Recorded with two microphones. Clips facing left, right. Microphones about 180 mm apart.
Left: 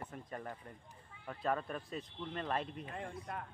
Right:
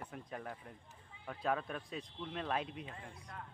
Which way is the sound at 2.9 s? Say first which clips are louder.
Left 8 dB; 60° left (ahead or behind).